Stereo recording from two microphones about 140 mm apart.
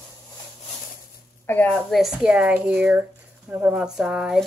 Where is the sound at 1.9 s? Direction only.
5° right (ahead or behind).